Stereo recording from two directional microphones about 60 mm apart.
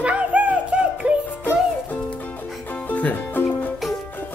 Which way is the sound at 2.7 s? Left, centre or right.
Left.